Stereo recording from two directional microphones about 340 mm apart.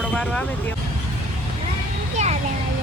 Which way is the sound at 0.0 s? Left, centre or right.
Centre.